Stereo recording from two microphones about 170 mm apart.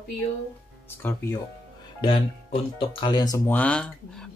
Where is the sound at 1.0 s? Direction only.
10° left (ahead or behind).